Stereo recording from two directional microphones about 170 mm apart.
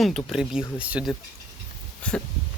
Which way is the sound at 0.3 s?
5° right (ahead or behind).